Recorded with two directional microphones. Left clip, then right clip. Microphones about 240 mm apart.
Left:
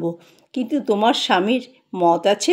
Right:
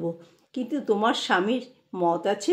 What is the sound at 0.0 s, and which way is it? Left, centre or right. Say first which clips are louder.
Speech: left 5 dB; left.